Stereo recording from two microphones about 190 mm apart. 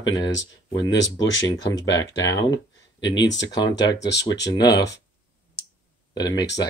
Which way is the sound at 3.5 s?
20° left (ahead or behind).